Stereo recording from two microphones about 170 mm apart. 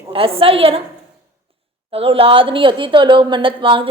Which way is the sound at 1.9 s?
35° right (ahead or behind).